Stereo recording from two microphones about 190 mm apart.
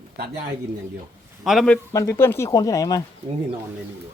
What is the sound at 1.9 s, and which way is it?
Speech, 15° left (ahead or behind).